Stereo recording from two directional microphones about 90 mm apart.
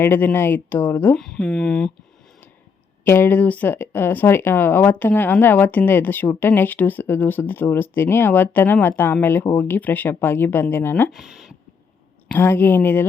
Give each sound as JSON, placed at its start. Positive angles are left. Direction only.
{"t": 0.0, "sound": "speech", "side_deg": 20}
{"t": 1.1, "sound": "speech", "side_deg": 5}
{"t": 3.0, "sound": "speech", "side_deg": 25}
{"t": 11.1, "sound": "speech", "side_deg": -5}
{"t": 12.3, "sound": "speech", "side_deg": 25}